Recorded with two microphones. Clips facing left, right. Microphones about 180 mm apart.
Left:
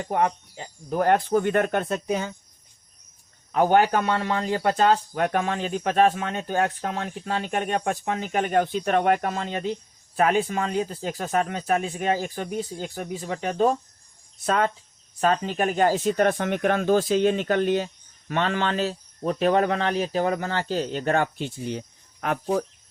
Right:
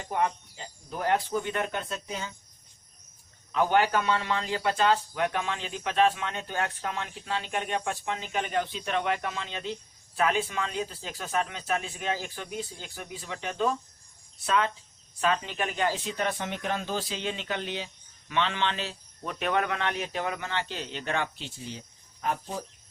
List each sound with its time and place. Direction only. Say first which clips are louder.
0.0 s speech: left 5 dB; 50° left (ahead or behind)
3.5 s speech: left 5 dB; 45° left (ahead or behind); by 22.6 s 80° left